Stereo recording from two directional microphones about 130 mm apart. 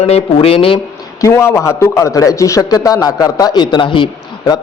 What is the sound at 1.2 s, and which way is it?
A man's voice, 20° left (ahead or behind).